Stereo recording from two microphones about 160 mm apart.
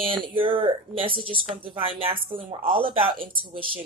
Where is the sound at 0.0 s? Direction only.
35° right (ahead or behind).